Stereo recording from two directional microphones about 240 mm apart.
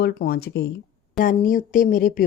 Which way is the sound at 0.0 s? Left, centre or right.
Left.